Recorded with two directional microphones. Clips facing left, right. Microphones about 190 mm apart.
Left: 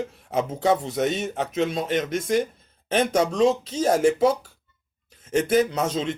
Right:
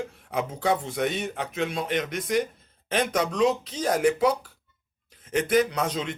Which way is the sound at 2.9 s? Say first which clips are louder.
Left 4 dB; 30° left (ahead or behind).